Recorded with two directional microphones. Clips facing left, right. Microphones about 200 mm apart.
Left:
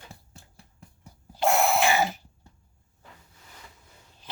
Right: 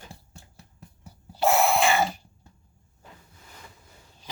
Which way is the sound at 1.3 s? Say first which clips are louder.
Right 1 dB; centre (ahead or behind).